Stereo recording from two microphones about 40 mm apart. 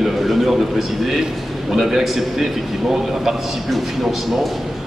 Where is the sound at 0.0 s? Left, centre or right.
Centre.